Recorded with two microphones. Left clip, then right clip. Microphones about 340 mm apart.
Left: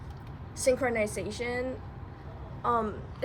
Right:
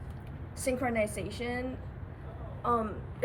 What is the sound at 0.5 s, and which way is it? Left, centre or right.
A woman's voice, left.